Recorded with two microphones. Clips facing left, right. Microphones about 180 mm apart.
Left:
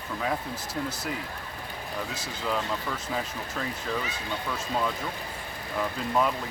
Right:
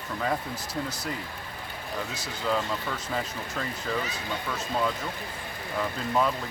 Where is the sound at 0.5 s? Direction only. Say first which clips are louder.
Even; 25° left (ahead or behind).